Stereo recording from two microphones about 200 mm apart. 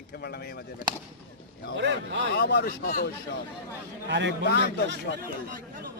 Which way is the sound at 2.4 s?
55° left (ahead or behind).